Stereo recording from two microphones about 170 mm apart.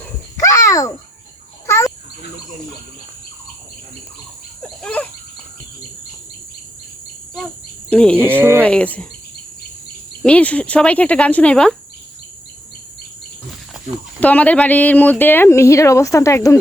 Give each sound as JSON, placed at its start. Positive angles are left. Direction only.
{"t": 0.3, "sound": "babbling", "side_deg": 20}
{"t": 1.6, "sound": "a sound", "side_deg": 15}
{"t": 4.8, "sound": "a sound", "side_deg": 10}
{"t": 7.9, "sound": "speech", "side_deg": 5}
{"t": 8.2, "sound": "speech", "side_deg": -15}
{"t": 8.6, "sound": "speech", "side_deg": 10}
{"t": 10.2, "sound": "speech", "side_deg": 5}
{"t": 14.2, "sound": "speech", "side_deg": 10}